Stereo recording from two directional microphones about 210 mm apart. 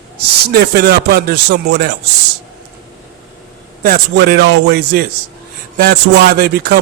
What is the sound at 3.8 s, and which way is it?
A man's voice, 45° right (ahead or behind).